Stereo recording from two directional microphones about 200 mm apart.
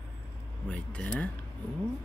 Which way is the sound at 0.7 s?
5° left (ahead or behind).